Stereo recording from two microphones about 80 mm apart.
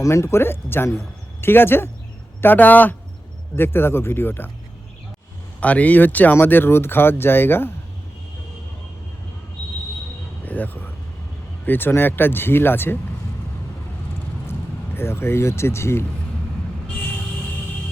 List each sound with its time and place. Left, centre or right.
0.0 s speech: left
5.5 s speech: centre
10.4 s a sound: left
11.6 s speech: left
14.9 s speech: left